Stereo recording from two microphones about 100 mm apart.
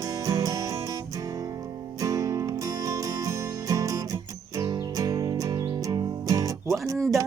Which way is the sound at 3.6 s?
35° right (ahead or behind).